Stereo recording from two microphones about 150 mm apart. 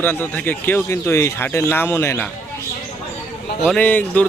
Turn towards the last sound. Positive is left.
turn(degrees=10)  # may be behind; listen again after turning